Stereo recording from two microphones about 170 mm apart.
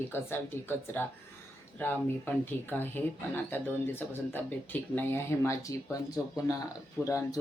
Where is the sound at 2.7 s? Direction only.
10° left (ahead or behind).